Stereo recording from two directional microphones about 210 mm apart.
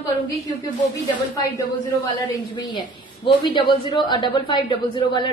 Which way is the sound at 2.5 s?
20° left (ahead or behind).